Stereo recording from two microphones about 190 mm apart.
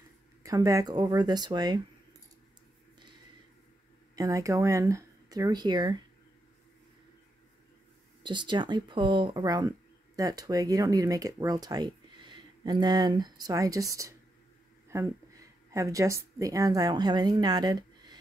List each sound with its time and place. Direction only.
0.4 s a woman's voice: 20° right (ahead or behind)
4.1 s speech: 20° right (ahead or behind)
8.2 s a woman's voice: 25° right (ahead or behind)